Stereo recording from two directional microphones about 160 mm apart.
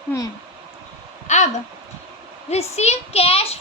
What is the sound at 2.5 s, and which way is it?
A woman's voice, 40° left (ahead or behind).